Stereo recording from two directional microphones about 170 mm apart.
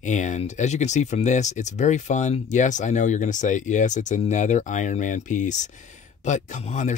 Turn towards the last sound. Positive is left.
turn(degrees=45)  # may be behind; listen again after turning